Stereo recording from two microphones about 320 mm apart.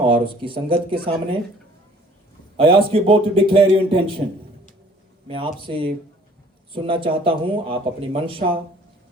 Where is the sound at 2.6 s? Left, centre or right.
Centre.